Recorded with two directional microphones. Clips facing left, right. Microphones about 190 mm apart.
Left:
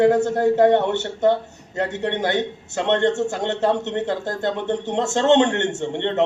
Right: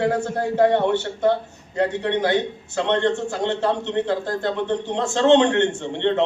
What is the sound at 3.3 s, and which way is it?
Speech, 45° left (ahead or behind).